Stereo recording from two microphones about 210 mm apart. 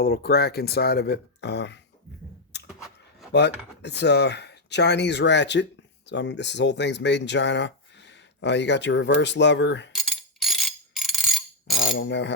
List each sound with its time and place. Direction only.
0.0 s speech: 45° left (ahead or behind)
3.3 s speech: 55° left (ahead or behind)
9.9 s a sound: centre (ahead or behind)
11.8 s speech: 60° left (ahead or behind)